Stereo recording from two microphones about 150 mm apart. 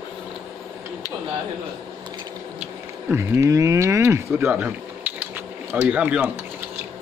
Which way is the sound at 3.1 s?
15° right (ahead or behind).